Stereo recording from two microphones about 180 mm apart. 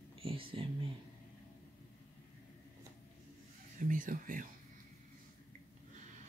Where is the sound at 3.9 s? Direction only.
50° right (ahead or behind).